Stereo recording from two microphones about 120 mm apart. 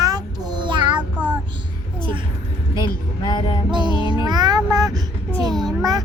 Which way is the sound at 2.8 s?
40° left (ahead or behind).